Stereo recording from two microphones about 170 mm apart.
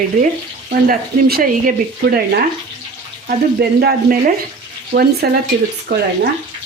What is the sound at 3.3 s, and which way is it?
Speech, 65° right (ahead or behind).